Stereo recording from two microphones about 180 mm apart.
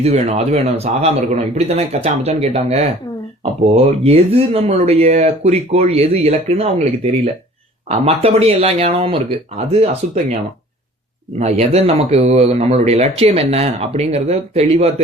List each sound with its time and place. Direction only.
0.0 s speech: 35° right (ahead or behind)
11.3 s speech: 35° right (ahead or behind)